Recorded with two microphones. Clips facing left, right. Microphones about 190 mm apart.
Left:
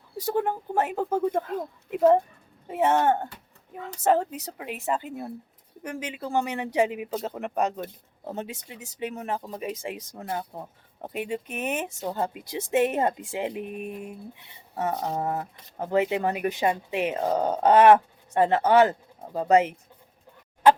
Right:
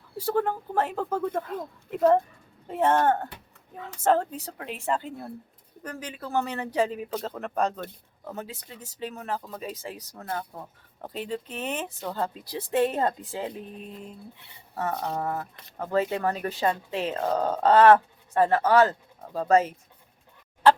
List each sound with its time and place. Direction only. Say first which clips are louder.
0.3 s speech: even; 15° left (ahead or behind)
5.8 s speech: left 3 dB; 20° left (ahead or behind)
8.2 s speech: left 3 dB; 25° left (ahead or behind)